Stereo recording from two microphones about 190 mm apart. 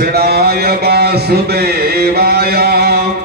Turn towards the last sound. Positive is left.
turn(degrees=-55)  # may be behind; listen again after turning